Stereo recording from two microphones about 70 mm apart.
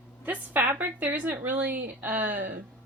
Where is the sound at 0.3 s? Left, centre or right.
Right.